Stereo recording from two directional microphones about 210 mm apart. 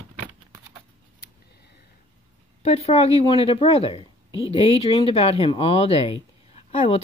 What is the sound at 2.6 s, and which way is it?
Speech, 30° left (ahead or behind).